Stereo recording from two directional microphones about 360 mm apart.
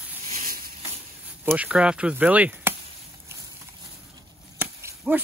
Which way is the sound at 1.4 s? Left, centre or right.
Centre.